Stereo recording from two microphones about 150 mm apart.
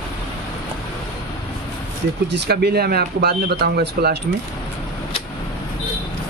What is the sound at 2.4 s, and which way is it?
Speech, 90° right.